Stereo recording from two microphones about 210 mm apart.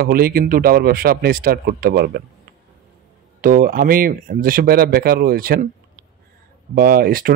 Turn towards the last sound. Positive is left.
turn(degrees=-45)  # may be behind; listen again after turning